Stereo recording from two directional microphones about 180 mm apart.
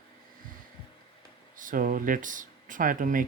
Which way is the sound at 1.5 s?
50° right (ahead or behind).